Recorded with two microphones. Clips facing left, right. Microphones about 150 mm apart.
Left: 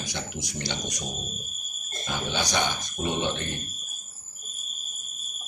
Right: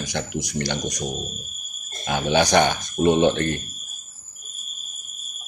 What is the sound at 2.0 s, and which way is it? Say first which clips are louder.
Speech: right 10 dB; 70° right (ahead or behind).